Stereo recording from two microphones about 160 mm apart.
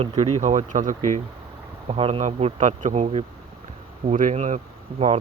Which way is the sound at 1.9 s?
35° right (ahead or behind).